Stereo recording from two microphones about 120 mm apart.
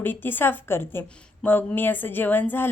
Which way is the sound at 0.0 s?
15° left (ahead or behind).